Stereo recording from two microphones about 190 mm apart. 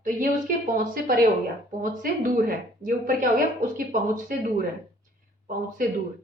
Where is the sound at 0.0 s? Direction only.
45° right (ahead or behind).